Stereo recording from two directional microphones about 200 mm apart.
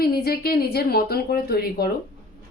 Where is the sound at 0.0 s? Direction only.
50° left (ahead or behind).